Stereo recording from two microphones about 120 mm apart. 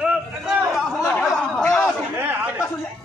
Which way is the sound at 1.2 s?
10° left (ahead or behind).